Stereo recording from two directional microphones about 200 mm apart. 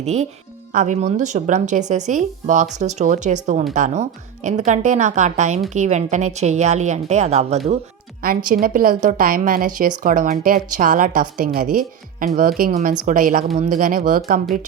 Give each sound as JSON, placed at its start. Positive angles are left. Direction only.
{"t": 0.0, "sound": "a woman's voice", "side_deg": -35}
{"t": 8.2, "sound": "a woman's voice", "side_deg": -45}